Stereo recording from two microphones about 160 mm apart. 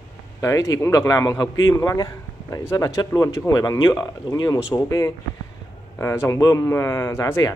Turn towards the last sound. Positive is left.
turn(degrees=20)  # may be behind; listen again after turning